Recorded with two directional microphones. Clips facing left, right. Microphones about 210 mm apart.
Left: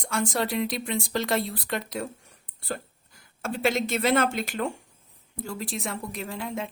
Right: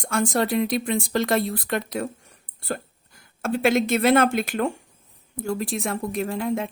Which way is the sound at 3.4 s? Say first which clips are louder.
Right 5 dB; 55° right (ahead or behind).